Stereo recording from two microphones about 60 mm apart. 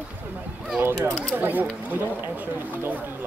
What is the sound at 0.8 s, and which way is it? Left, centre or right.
Speech, right.